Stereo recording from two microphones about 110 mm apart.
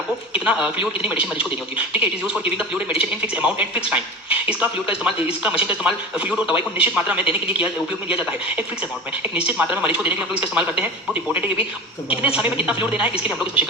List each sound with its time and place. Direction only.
0.3 s a man's voice: 10° right (ahead or behind)